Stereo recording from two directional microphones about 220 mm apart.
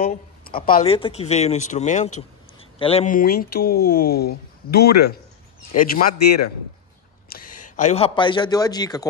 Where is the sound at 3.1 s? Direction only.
40° left (ahead or behind).